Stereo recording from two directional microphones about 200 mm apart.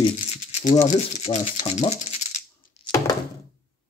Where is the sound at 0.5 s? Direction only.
30° left (ahead or behind).